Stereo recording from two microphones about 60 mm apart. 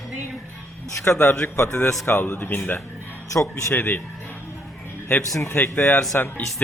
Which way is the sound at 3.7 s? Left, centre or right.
Left.